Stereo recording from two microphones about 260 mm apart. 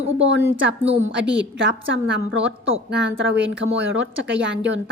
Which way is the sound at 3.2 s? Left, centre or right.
Right.